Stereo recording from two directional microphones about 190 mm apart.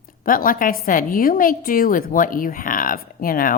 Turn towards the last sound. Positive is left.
turn(degrees=50)  # may be behind; listen again after turning